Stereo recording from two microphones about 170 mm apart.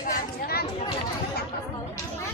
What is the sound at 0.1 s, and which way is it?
Chatter, 65° left (ahead or behind).